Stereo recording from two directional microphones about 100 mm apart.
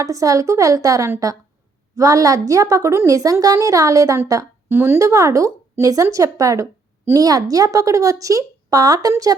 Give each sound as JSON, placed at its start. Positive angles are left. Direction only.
{"t": 0.0, "sound": "a woman's voice", "side_deg": -35}